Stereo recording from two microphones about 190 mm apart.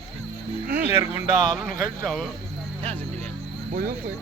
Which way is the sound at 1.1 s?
35° left (ahead or behind).